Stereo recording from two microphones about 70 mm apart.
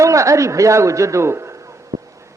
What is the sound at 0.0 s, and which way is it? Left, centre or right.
Speech, right.